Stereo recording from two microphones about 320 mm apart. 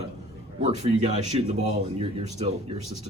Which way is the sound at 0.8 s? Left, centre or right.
Right.